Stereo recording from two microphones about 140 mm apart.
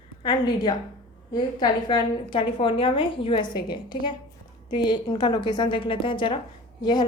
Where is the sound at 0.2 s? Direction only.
30° left (ahead or behind).